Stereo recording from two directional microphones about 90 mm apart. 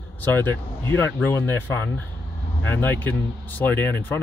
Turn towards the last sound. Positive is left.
turn(degrees=20)  # may be behind; listen again after turning